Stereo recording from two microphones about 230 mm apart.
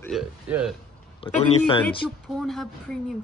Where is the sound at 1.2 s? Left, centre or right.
Left.